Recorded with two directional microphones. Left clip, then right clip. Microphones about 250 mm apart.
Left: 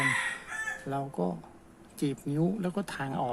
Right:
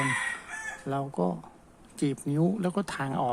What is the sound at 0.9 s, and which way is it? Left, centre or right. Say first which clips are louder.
Speech: right 7 dB; centre.